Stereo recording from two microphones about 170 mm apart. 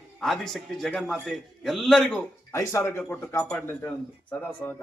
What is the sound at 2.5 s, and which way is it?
Speech, 15° left (ahead or behind).